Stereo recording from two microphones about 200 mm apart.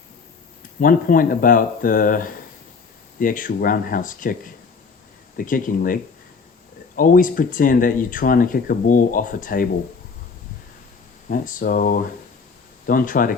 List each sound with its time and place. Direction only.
0.8 s speech: 45° left (ahead or behind)
5.4 s speech: 45° left (ahead or behind)
11.3 s speech: 45° left (ahead or behind)